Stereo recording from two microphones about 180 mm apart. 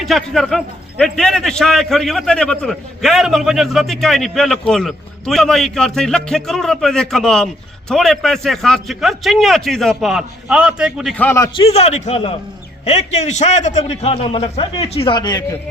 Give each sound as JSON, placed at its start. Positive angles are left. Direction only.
{"t": 0.0, "sound": "a man's voice", "side_deg": 0}
{"t": 11.2, "sound": "a man's voice", "side_deg": 15}
{"t": 11.5, "sound": "a man's voice", "side_deg": 35}